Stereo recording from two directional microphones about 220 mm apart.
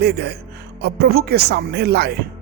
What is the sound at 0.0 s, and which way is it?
Speech, 45° right (ahead or behind).